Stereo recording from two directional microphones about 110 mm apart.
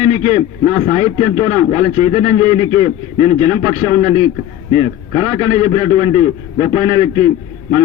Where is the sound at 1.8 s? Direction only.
50° right (ahead or behind).